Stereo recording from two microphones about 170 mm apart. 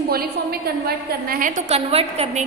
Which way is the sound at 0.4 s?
70° right (ahead or behind).